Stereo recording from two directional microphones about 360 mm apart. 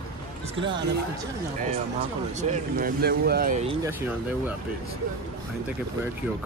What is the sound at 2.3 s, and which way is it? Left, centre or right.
Speech, right.